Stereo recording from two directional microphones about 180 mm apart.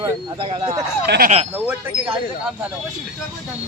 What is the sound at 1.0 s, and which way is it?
Speech, 65° right (ahead or behind).